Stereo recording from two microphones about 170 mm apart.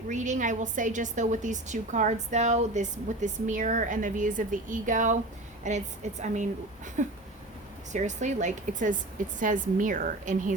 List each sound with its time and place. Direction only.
0.1 s a woman's voice: 45° right (ahead or behind)